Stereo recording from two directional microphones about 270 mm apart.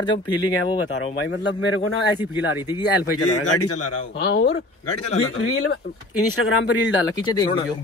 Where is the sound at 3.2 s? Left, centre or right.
Left.